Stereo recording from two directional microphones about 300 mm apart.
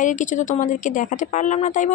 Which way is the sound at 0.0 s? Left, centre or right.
Left.